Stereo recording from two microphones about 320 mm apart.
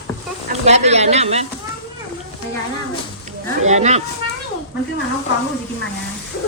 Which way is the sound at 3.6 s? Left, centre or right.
Right.